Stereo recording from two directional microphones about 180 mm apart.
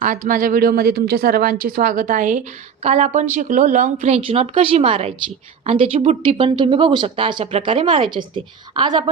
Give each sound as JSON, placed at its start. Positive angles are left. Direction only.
{"t": 0.0, "sound": "speech", "side_deg": -45}